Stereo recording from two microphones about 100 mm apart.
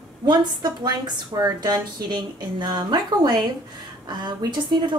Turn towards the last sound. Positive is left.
turn(degrees=-45)  # may be behind; listen again after turning